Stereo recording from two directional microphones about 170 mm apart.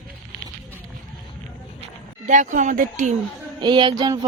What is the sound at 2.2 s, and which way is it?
Speech, 45° right (ahead or behind).